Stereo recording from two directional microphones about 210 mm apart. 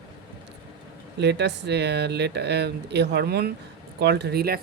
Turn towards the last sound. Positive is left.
turn(degrees=-50)  # may be behind; listen again after turning